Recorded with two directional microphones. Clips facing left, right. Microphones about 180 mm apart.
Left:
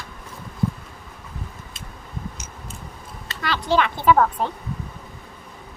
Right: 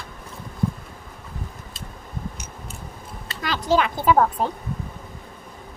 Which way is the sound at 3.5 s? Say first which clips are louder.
Even; 40° right (ahead or behind).